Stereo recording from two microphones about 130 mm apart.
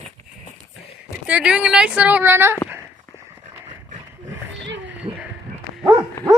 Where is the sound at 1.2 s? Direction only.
10° right (ahead or behind).